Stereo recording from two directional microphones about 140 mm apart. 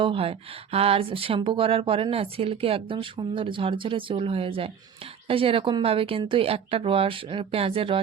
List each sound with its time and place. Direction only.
0.0 s speech: 40° right (ahead or behind)